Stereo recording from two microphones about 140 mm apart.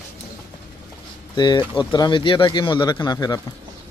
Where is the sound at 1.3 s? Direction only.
30° left (ahead or behind).